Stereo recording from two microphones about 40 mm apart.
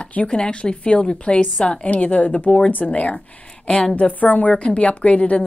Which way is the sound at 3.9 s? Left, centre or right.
Left.